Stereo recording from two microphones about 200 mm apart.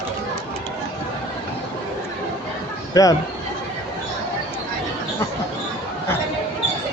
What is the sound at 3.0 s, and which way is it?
Speech, 15° left (ahead or behind).